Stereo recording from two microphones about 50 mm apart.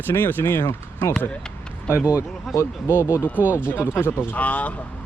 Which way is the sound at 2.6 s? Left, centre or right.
Left.